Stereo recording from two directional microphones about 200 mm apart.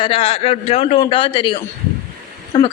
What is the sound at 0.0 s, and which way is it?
A man's voice, 25° left (ahead or behind).